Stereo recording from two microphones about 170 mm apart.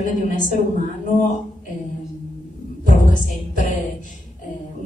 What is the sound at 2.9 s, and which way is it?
Music, 50° left (ahead or behind).